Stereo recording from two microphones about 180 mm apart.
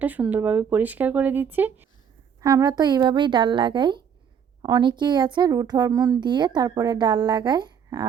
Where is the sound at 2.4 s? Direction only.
20° right (ahead or behind).